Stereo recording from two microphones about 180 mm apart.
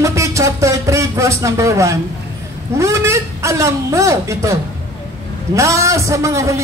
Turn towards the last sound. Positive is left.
turn(degrees=-15)  # may be behind; listen again after turning